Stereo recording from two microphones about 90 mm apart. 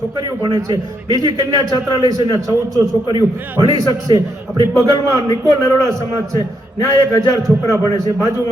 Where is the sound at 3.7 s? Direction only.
50° right (ahead or behind).